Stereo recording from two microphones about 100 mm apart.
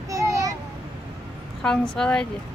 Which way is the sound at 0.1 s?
35° right (ahead or behind).